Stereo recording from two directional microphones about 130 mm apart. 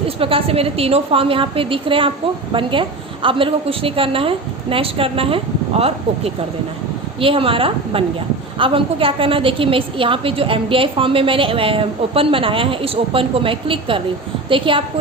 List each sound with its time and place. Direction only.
0.0 s a woman's voice: 45° right (ahead or behind)